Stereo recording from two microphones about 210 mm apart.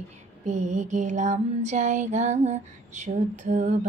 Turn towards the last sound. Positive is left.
turn(degrees=-35)  # may be behind; listen again after turning